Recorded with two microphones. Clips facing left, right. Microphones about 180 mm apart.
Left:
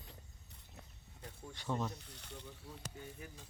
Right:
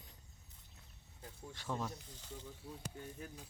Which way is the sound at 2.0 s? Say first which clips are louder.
Right 1 dB; 70° left (ahead or behind).